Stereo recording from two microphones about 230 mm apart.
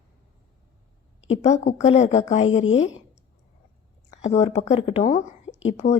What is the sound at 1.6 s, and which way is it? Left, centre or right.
Speech, left.